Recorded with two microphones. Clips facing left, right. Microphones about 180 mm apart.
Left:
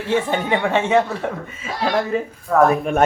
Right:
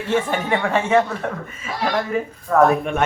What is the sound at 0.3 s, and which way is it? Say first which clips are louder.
Speech: left 1 dB; 20° left (ahead or behind).